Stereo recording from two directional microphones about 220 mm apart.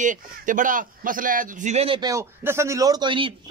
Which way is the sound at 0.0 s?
35° right (ahead or behind).